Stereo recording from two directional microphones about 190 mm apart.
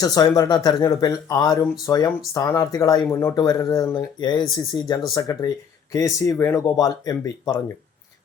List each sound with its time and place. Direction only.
0.0 s speech: 20° left (ahead or behind)